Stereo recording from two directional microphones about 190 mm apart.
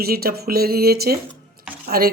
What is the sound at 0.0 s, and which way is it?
Speech, 50° right (ahead or behind).